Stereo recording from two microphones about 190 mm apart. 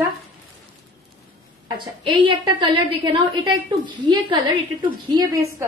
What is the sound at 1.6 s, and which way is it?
A woman's voice, 25° right (ahead or behind).